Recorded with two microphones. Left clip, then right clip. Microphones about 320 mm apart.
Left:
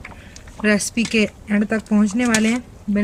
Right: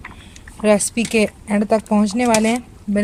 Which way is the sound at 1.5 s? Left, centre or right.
Right.